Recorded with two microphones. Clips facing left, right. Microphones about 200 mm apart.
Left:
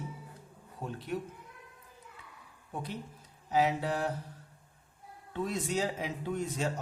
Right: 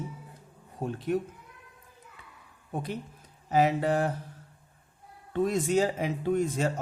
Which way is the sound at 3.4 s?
50° right (ahead or behind).